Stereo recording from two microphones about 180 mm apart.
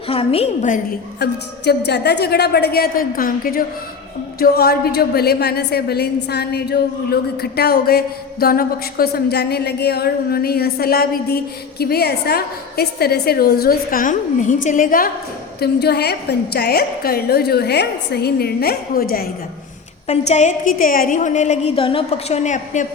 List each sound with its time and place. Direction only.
0.1 s a woman's voice: 30° left (ahead or behind)
1.2 s a woman's voice: 65° left (ahead or behind); by 15.1 s 50° left (ahead or behind)
15.6 s a woman's voice: 65° left (ahead or behind)
20.1 s a woman's voice: 40° left (ahead or behind)